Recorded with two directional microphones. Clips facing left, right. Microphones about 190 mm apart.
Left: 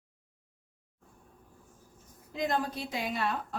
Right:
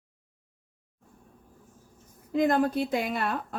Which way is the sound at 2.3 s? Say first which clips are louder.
Right 8 dB; 55° right (ahead or behind).